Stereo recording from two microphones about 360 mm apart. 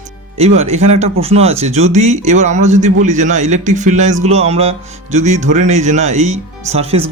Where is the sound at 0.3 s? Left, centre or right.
Centre.